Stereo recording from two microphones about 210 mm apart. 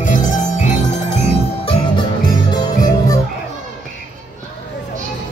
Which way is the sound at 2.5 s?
20° left (ahead or behind).